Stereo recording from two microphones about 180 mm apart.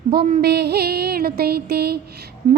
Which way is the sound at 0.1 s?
60° right (ahead or behind).